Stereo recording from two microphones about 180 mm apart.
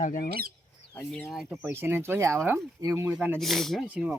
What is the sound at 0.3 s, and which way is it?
Squawk, 55° right (ahead or behind).